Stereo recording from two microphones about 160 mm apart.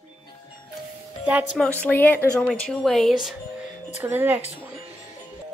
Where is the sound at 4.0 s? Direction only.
15° right (ahead or behind).